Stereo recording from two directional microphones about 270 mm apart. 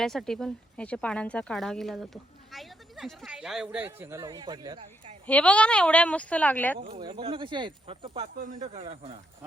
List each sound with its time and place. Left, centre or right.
0.0 s speech: centre
5.2 s speech: centre
6.7 s speech: centre